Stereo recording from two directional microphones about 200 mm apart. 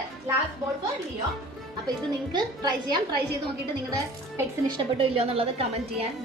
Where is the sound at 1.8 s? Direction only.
20° right (ahead or behind).